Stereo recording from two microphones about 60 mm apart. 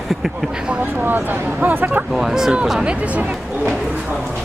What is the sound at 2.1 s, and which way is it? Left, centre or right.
Speech, centre.